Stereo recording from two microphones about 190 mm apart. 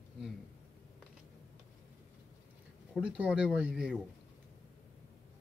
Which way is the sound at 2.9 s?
5° right (ahead or behind).